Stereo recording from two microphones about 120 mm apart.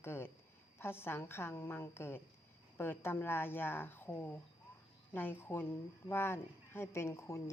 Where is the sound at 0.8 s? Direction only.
20° left (ahead or behind).